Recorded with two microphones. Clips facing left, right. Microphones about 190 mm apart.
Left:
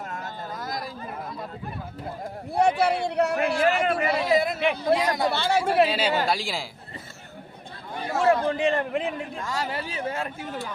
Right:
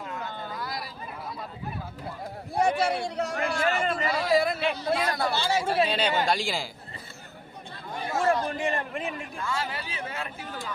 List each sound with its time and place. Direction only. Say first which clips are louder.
0.0 s a sound: left 1 dB; 45° left (ahead or behind)
2.6 s a sound: left 3 dB; 60° left (ahead or behind)
4.6 s a man's voice: left 5 dB; 60° left (ahead or behind)
4.9 s speech: left 3 dB; 20° left (ahead or behind)
5.3 s a man's voice: left 3 dB; 60° left (ahead or behind)
5.9 s speech: left 1 dB; 5° left (ahead or behind)
8.1 s a man's voice: left 4 dB; 65° left (ahead or behind)
9.5 s speech: left 2 dB; 40° left (ahead or behind)